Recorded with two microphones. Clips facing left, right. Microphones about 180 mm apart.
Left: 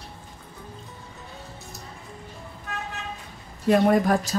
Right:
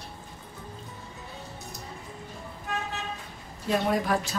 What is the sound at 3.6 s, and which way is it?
Speech, 50° left (ahead or behind).